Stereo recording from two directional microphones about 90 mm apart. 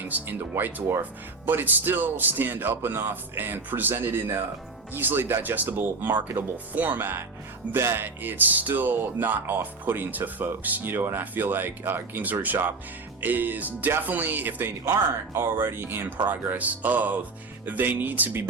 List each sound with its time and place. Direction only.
0.1 s speech: 25° right (ahead or behind)